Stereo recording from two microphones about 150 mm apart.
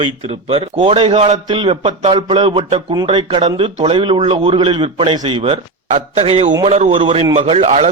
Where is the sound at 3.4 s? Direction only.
45° right (ahead or behind).